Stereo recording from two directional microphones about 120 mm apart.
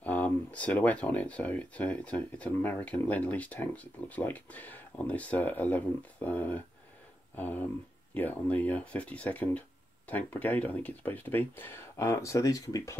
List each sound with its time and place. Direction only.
0.0 s speech: 15° left (ahead or behind)